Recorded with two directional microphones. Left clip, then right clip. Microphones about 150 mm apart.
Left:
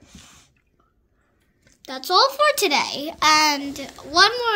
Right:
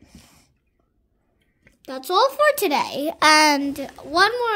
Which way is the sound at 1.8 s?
70° right (ahead or behind).